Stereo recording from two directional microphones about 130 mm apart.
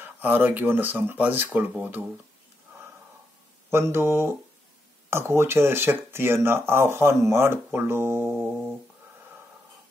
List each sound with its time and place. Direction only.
0.0 s speech: 15° right (ahead or behind)
3.7 s speech: 20° right (ahead or behind)